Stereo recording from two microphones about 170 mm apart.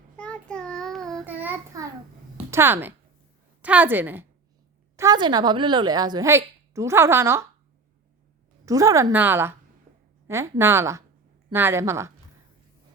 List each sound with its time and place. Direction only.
0.2 s child singing: 5° left (ahead or behind)
1.2 s child singing: 10° right (ahead or behind)
2.5 s a woman's voice: 15° right (ahead or behind)
4.9 s a woman's voice: 25° right (ahead or behind)
8.6 s a woman's voice: 20° right (ahead or behind)